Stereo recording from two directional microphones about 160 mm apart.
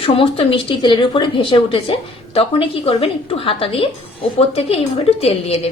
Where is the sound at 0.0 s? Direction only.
35° left (ahead or behind).